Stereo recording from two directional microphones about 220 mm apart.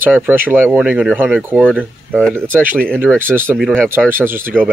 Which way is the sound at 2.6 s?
10° right (ahead or behind).